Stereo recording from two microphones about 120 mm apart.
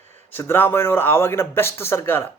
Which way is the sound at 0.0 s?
70° right (ahead or behind).